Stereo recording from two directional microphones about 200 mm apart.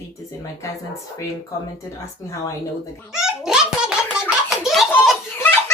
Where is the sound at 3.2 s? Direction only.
5° right (ahead or behind).